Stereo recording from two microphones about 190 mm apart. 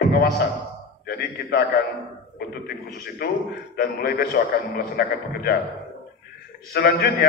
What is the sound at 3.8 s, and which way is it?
A man's voice, 55° left (ahead or behind).